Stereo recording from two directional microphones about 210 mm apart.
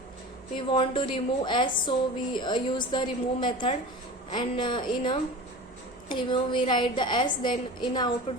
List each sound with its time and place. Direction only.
0.5 s a woman's voice: 25° left (ahead or behind)